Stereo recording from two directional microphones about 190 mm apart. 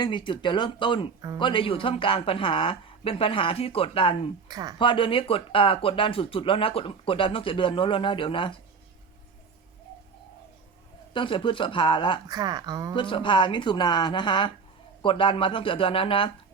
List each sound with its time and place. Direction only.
0.0 s speech: 25° left (ahead or behind)
4.4 s speech: 20° right (ahead or behind)
4.8 s speech: 25° left (ahead or behind)
11.1 s speech: 25° left (ahead or behind)
12.3 s speech: 20° right (ahead or behind)
13.0 s speech: 25° left (ahead or behind)